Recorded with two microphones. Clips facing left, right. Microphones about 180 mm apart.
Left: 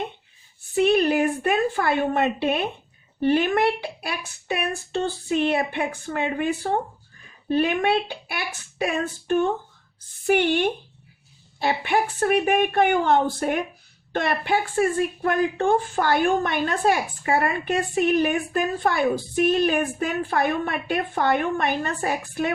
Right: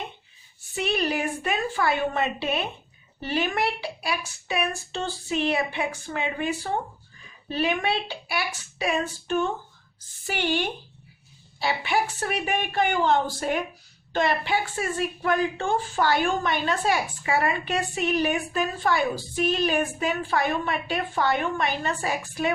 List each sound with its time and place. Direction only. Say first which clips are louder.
0.8 s a woman's voice: left 7 dB; 50° left (ahead or behind)